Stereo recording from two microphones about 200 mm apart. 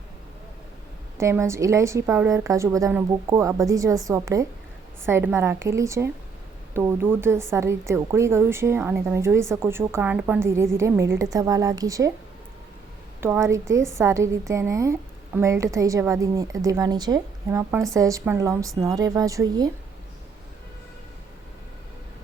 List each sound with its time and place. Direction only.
1.2 s a woman's voice: 15° right (ahead or behind)
13.2 s a woman's voice: 15° right (ahead or behind)